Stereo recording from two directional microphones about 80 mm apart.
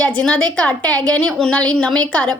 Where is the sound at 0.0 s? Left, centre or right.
Centre.